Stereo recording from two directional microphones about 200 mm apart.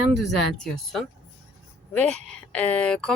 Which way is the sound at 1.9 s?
5° left (ahead or behind).